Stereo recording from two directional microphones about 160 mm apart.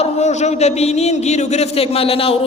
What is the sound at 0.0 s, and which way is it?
A man's voice, 45° left (ahead or behind).